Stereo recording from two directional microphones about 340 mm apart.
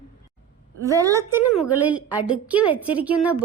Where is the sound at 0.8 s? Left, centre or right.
Centre.